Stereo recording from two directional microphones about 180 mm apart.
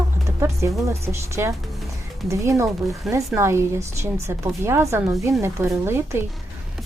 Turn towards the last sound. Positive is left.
turn(degrees=-15)  # may be behind; listen again after turning